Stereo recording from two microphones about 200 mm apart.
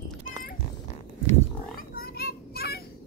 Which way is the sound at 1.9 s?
50° left (ahead or behind).